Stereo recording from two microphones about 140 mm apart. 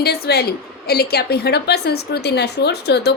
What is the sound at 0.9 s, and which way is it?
Speech, 90° left.